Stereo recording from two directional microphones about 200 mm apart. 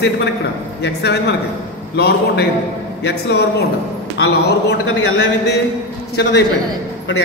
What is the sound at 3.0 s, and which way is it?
Speech, 60° left (ahead or behind).